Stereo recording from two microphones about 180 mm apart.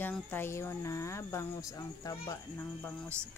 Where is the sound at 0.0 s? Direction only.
10° left (ahead or behind).